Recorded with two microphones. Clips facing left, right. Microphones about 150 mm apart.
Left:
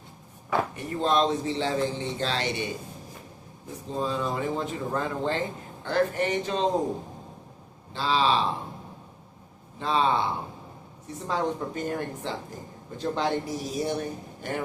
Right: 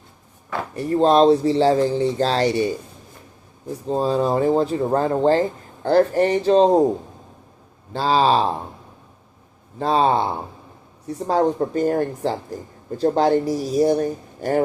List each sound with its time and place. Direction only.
0.8 s speech: 35° right (ahead or behind)
7.9 s speech: 40° right (ahead or behind)
9.7 s speech: 40° right (ahead or behind)